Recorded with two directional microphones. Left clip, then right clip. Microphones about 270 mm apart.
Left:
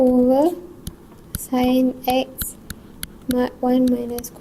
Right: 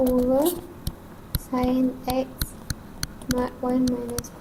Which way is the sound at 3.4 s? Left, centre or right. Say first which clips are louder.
Left 6 dB; left.